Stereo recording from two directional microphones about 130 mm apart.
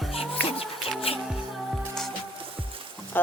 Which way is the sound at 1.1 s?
50° left (ahead or behind).